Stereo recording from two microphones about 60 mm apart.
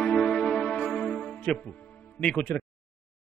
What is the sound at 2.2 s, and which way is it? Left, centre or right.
Speech, centre.